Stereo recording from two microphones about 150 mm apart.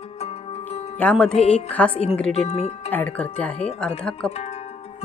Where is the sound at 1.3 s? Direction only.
45° left (ahead or behind).